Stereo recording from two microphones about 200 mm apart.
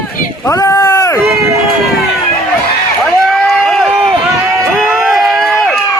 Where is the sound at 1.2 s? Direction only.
15° right (ahead or behind).